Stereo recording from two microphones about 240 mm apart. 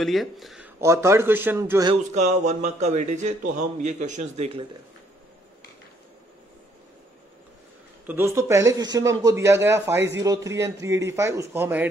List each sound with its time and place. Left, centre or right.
0.0 s speech: centre
0.7 s speech: centre
2.3 s a man's voice: right
8.1 s speech: centre